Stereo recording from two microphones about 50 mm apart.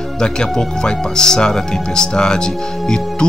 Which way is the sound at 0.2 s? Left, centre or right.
Centre.